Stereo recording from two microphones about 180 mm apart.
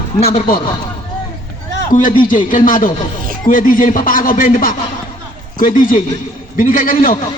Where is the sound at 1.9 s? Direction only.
50° left (ahead or behind).